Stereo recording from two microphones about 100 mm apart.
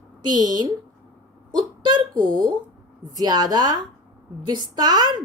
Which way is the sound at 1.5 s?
50° right (ahead or behind).